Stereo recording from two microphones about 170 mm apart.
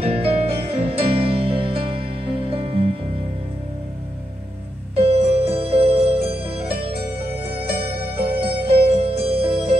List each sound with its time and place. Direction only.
0.0 s music: 35° right (ahead or behind)
4.9 s music: 35° right (ahead or behind)
8.4 s music: 35° right (ahead or behind)